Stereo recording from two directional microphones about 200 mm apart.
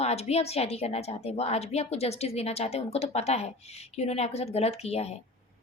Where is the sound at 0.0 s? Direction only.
30° left (ahead or behind).